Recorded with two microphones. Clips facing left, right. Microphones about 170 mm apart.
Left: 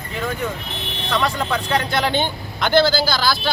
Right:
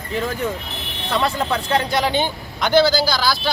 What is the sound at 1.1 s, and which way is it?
Speech, 30° right (ahead or behind).